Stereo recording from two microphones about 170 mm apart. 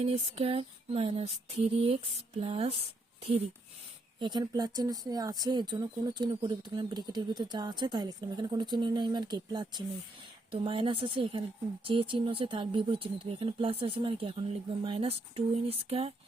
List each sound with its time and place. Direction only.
0.0 s speech: 35° right (ahead or behind)
4.2 s speech: 25° right (ahead or behind)